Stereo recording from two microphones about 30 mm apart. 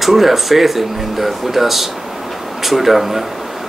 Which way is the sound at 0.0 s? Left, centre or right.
Centre.